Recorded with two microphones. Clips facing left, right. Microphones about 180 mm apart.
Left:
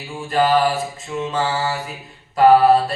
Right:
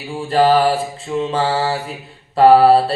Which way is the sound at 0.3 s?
30° right (ahead or behind).